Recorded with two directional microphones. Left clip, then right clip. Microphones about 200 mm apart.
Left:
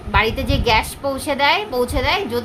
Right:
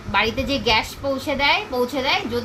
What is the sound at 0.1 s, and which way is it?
A woman's voice, 10° left (ahead or behind).